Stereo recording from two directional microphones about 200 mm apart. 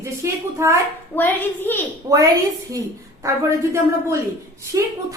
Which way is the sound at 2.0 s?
20° right (ahead or behind).